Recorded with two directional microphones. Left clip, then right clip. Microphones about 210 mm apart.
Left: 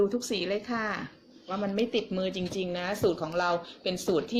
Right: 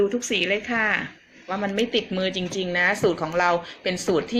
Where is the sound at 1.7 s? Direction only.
15° left (ahead or behind).